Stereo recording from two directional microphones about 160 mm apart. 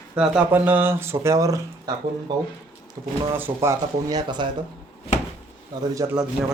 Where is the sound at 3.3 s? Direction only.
15° right (ahead or behind).